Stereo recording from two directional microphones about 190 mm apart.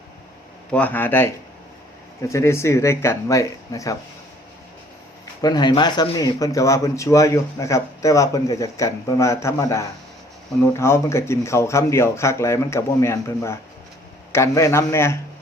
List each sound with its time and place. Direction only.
0.7 s speech: 10° left (ahead or behind)
5.2 s speech: 20° left (ahead or behind)